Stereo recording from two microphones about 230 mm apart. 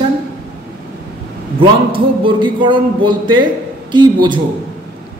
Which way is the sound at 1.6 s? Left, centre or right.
Right.